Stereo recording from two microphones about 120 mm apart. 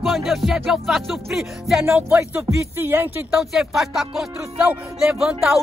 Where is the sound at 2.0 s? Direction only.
15° right (ahead or behind).